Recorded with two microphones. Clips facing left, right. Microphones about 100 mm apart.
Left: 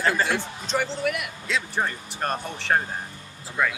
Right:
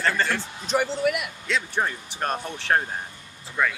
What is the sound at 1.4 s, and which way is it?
Speech, centre (ahead or behind).